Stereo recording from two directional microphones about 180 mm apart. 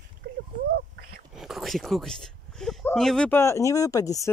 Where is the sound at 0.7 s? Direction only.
55° right (ahead or behind).